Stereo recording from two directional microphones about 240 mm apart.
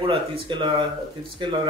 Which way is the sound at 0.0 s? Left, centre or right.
Right.